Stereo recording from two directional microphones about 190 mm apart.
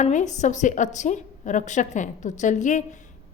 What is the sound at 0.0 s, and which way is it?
A woman's voice, 40° left (ahead or behind).